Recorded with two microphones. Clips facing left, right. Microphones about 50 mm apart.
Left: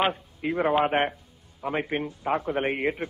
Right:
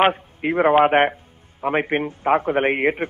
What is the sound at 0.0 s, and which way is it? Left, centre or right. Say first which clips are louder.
A man's voice: right 8 dB; right.